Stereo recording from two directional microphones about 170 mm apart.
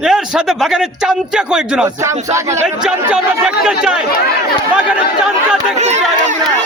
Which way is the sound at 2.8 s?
5° right (ahead or behind).